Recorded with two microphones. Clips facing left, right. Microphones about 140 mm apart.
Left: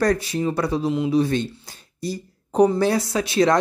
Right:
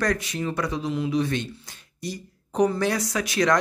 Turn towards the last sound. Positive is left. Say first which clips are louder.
# left 4 dB
turn(degrees=30)  # may be behind; listen again after turning